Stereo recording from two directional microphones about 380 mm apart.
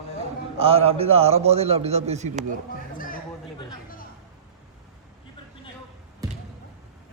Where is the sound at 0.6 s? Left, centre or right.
Centre.